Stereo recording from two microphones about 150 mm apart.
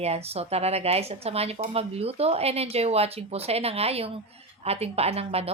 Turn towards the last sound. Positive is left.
turn(degrees=-40)  # may be behind; listen again after turning